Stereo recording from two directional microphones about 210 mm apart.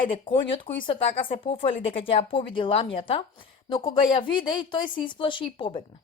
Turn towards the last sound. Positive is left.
turn(degrees=25)  # may be behind; listen again after turning